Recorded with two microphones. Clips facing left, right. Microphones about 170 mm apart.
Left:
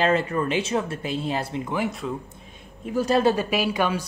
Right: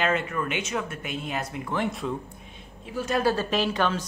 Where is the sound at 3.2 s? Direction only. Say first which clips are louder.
Left 3 dB; 15° left (ahead or behind).